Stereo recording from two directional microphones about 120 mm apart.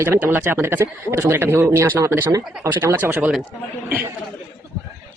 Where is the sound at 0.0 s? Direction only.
20° right (ahead or behind).